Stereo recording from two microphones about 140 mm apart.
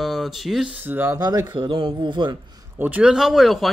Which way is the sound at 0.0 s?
Centre (ahead or behind).